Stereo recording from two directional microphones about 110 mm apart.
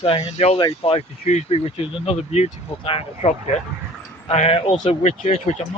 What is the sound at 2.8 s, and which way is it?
Speech, 55° left (ahead or behind).